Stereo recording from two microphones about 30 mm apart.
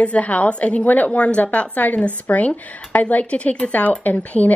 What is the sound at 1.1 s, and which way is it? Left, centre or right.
Speech, left.